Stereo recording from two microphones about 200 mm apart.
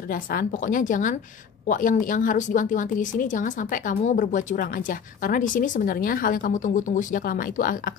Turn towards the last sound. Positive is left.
turn(degrees=45)  # may be behind; listen again after turning